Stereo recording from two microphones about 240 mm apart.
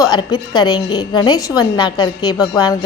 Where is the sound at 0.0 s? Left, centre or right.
Centre.